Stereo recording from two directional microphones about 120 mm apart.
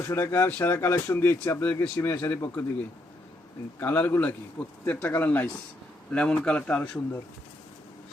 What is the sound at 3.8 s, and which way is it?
A man's voice, 15° left (ahead or behind).